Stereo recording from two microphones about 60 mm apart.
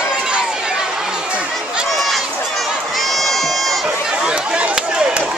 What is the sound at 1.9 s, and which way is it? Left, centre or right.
Run, centre.